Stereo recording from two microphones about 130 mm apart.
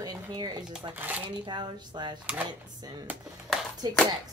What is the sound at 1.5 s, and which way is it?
Speech, 35° right (ahead or behind).